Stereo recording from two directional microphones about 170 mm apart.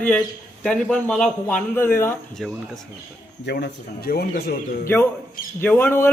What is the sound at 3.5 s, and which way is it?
Speech, 65° left (ahead or behind).